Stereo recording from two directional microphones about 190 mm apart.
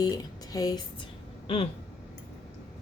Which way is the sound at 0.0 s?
20° left (ahead or behind).